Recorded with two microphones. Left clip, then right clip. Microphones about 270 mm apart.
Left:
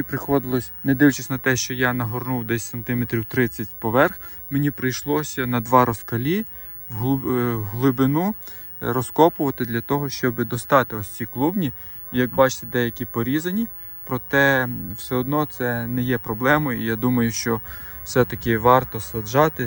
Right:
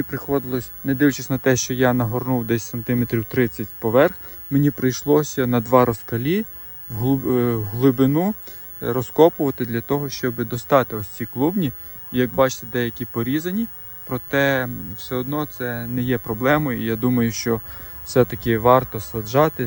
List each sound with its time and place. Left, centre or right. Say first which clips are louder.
0.3 s speech: left 1 dB; centre